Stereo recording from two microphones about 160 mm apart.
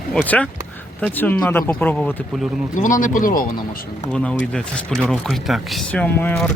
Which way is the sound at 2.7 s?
55° left (ahead or behind).